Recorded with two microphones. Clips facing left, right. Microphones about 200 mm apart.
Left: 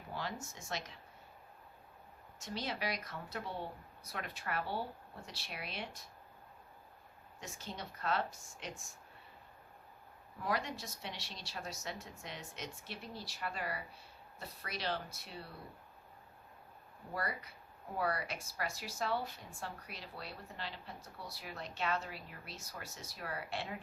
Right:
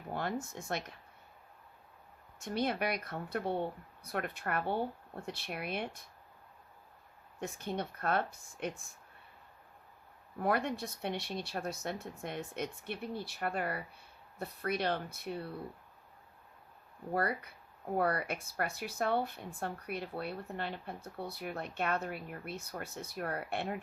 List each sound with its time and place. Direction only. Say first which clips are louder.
0.1 s speech: right 6 dB; 55° right (ahead or behind)
2.4 s speech: right 7 dB; 55° right (ahead or behind)
7.3 s speech: right 9 dB; 60° right (ahead or behind)
10.4 s speech: right 6 dB; 55° right (ahead or behind)
17.2 s speech: right 7 dB; 55° right (ahead or behind)